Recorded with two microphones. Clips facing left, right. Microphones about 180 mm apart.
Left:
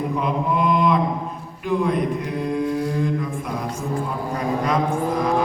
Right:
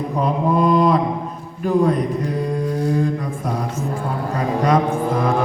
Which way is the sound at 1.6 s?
40° right (ahead or behind).